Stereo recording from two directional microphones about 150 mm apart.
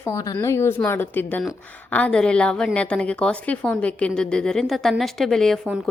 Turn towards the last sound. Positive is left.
turn(degrees=0)  # may be behind; listen again after turning